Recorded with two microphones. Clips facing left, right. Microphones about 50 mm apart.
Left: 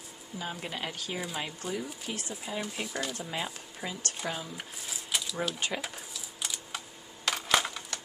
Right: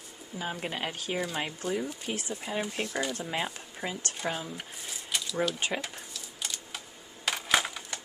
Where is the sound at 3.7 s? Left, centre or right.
Centre.